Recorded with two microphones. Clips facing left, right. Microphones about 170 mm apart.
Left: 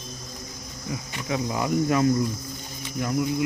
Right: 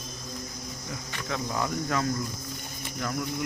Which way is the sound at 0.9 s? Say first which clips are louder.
Left 6 dB; 15° left (ahead or behind).